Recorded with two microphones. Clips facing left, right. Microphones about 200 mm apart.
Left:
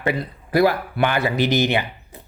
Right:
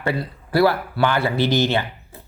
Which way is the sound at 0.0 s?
20° left (ahead or behind).